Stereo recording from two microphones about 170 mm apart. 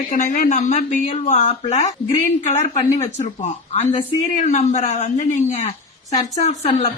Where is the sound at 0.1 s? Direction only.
50° left (ahead or behind).